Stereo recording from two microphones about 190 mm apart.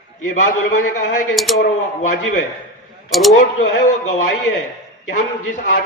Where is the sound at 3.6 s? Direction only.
45° left (ahead or behind).